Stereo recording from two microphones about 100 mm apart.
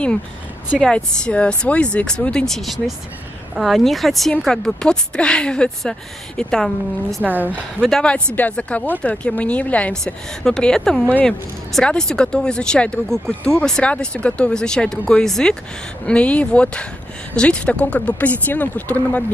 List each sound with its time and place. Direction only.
0.7 s speech: 10° left (ahead or behind)
7.2 s a woman's voice: 15° right (ahead or behind)
7.8 s speech: 10° left (ahead or behind)